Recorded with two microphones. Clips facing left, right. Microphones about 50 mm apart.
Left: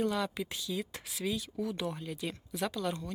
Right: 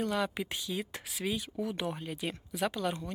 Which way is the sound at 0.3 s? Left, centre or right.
Right.